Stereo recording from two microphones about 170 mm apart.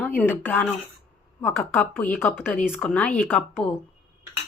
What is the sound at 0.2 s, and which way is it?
Speech, 10° left (ahead or behind).